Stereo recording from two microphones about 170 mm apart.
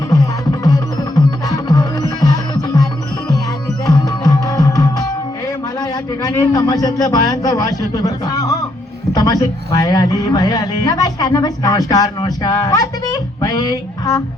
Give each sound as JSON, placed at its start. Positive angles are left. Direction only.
{"t": 0.1, "sound": "music", "side_deg": 20}
{"t": 3.8, "sound": "music", "side_deg": 20}
{"t": 6.2, "sound": "speech", "side_deg": 20}